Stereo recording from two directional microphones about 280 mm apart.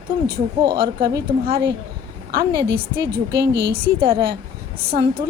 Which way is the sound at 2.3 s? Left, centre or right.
Right.